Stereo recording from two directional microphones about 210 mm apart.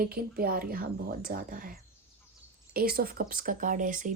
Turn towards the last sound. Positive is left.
turn(degrees=-40)  # may be behind; listen again after turning